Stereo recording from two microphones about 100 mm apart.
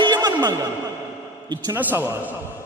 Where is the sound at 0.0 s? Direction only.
45° right (ahead or behind).